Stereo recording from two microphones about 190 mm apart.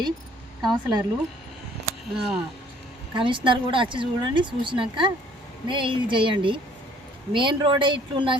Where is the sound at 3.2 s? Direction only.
25° right (ahead or behind).